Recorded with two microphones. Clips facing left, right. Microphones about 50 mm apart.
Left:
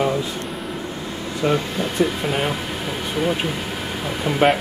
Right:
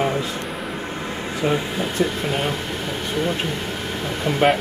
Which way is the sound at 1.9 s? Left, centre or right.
Centre.